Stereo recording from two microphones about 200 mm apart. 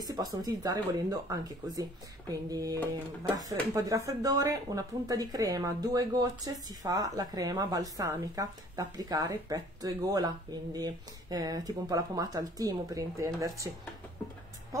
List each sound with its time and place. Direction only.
0.0 s speech: 20° right (ahead or behind)